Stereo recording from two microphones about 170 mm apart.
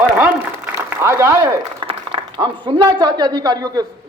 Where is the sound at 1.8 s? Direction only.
30° right (ahead or behind).